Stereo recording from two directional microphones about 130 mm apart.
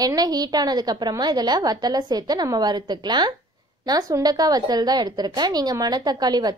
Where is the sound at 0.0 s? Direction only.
30° right (ahead or behind).